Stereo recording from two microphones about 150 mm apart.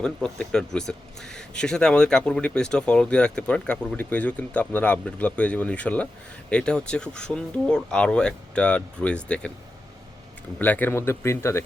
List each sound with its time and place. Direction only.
0.0 s speech: 5° left (ahead or behind)
10.6 s speech: 10° left (ahead or behind)